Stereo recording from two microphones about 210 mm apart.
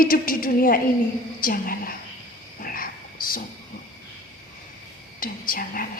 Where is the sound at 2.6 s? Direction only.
45° left (ahead or behind).